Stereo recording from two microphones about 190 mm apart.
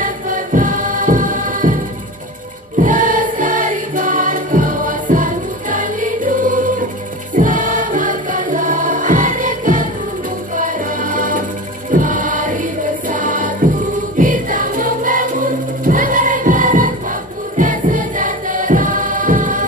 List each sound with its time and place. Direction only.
0.0 s music: 45° right (ahead or behind)
2.8 s music: 45° right (ahead or behind)